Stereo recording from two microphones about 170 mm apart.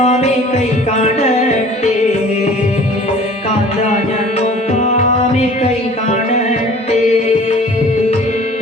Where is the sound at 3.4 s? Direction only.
40° left (ahead or behind).